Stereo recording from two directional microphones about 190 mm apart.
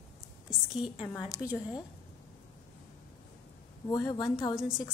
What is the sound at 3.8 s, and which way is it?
Speech, 20° left (ahead or behind).